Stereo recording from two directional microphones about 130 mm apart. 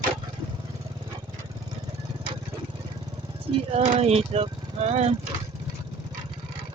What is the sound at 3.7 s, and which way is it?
Speech, 50° right (ahead or behind).